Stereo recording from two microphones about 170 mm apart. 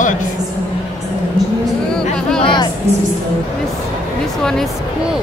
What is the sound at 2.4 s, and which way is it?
Music, 30° left (ahead or behind).